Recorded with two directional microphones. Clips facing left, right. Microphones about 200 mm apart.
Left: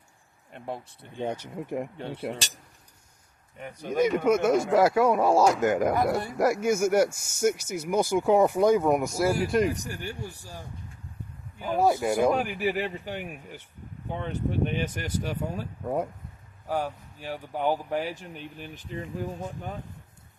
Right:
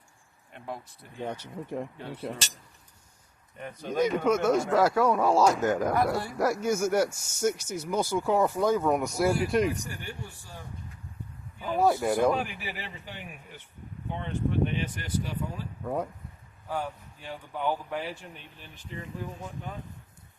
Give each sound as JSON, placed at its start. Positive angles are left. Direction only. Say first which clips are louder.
{"t": 0.5, "sound": "speech", "louder": "left 3 dB", "side_deg": 30}
{"t": 1.3, "sound": "speech", "louder": "left 2 dB", "side_deg": 15}
{"t": 2.0, "sound": "speech", "louder": "left 4 dB", "side_deg": 30}
{"t": 3.6, "sound": "speech", "louder": "left 2 dB", "side_deg": 15}
{"t": 9.6, "sound": "speech", "louder": "left 2 dB", "side_deg": 40}
{"t": 11.6, "sound": "speech", "louder": "left 1 dB", "side_deg": 10}
{"t": 12.5, "sound": "speech", "louder": "left 12 dB", "side_deg": 50}
{"t": 14.3, "sound": "speech", "louder": "right 1 dB", "side_deg": 45}
{"t": 15.8, "sound": "speech", "louder": "left 2 dB", "side_deg": 15}
{"t": 16.6, "sound": "speech", "louder": "left 4 dB", "side_deg": 40}